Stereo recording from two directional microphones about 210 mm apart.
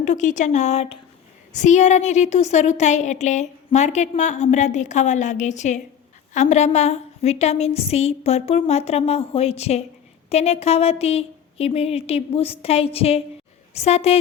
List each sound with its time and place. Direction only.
0.0 s a woman's voice: 35° left (ahead or behind)